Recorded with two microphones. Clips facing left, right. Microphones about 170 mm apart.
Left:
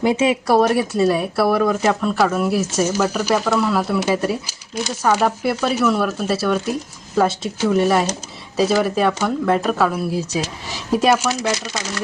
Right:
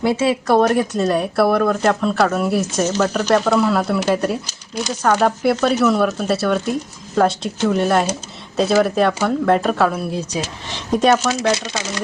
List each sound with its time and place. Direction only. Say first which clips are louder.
0.0 s speech: even; 15° left (ahead or behind)
11.5 s speech: right 2 dB; 20° right (ahead or behind)